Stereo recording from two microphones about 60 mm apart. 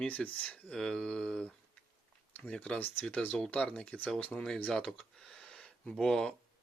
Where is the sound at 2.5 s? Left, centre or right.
Centre.